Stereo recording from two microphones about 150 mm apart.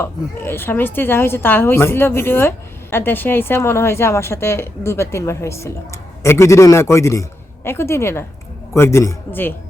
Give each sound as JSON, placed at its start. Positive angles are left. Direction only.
{"t": 0.0, "sound": "a woman's voice", "side_deg": 15}